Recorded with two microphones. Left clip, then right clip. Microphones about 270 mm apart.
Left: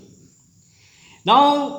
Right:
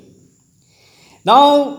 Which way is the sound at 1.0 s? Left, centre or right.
Right.